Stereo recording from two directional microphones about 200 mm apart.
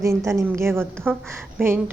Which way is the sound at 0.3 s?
15° right (ahead or behind).